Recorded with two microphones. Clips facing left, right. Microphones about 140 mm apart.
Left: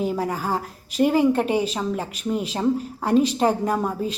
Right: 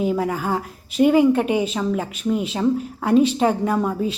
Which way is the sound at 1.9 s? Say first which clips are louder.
Right 3 dB; centre (ahead or behind).